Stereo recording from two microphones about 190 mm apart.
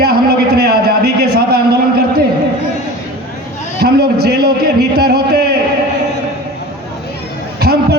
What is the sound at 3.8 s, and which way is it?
A man's voice, 55° right (ahead or behind).